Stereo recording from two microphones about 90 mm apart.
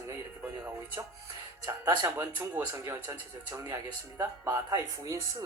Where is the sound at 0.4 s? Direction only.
25° right (ahead or behind).